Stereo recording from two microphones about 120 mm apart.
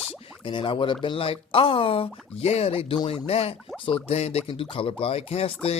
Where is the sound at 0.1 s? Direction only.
45° left (ahead or behind).